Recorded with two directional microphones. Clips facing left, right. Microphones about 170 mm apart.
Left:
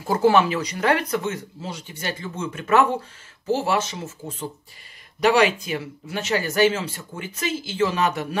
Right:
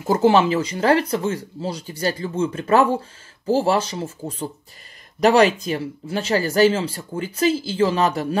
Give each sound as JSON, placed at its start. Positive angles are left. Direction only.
{"t": 0.0, "sound": "speech", "side_deg": -25}